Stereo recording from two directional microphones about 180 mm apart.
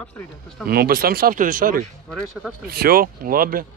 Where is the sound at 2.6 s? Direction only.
55° right (ahead or behind).